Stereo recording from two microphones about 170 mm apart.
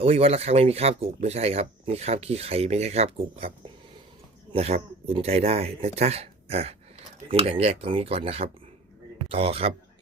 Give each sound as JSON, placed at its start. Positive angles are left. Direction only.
{"t": 0.0, "sound": "speech", "side_deg": -35}
{"t": 4.5, "sound": "a man's voice", "side_deg": -35}